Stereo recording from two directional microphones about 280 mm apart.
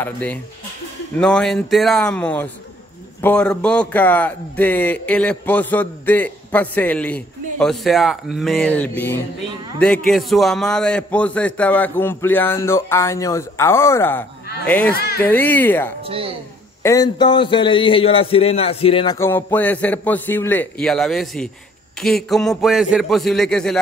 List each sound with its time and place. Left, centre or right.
0.0 s a man's voice: centre
15.0 s speech: left
15.2 s a man's voice: centre
16.1 s speech: centre
16.8 s a man's voice: centre